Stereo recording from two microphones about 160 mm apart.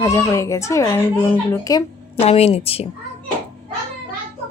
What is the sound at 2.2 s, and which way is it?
Speech, 40° left (ahead or behind).